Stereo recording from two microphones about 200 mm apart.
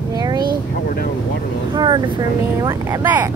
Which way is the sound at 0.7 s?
50° left (ahead or behind).